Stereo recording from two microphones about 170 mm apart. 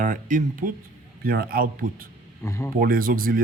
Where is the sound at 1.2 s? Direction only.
60° right (ahead or behind).